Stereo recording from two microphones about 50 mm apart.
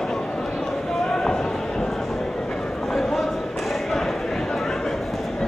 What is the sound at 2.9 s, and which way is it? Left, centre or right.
Clip-clop, centre.